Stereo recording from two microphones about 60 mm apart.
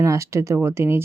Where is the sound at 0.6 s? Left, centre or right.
Right.